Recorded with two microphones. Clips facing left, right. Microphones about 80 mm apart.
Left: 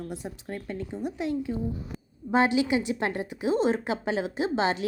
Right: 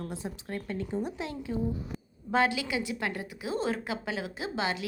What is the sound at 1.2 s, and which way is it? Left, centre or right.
A woman's voice, left.